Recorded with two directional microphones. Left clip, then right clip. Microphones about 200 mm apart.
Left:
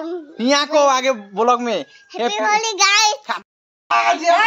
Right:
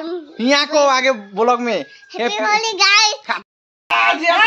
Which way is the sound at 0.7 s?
Centre (ahead or behind).